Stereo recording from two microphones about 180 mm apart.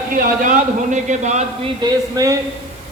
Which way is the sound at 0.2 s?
50° right (ahead or behind).